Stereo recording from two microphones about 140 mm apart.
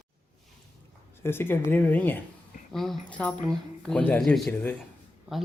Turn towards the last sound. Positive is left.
turn(degrees=0)  # may be behind; listen again after turning